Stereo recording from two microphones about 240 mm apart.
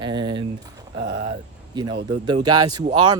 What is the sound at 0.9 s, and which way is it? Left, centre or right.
Speech, right.